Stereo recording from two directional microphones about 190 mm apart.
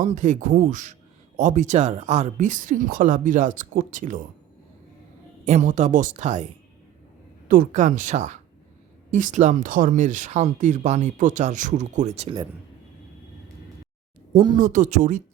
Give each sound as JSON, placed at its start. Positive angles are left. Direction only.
{"t": 0.0, "sound": "speech", "side_deg": -40}
{"t": 5.5, "sound": "speech", "side_deg": -40}
{"t": 14.3, "sound": "speech", "side_deg": -25}
{"t": 14.6, "sound": "speech", "side_deg": -40}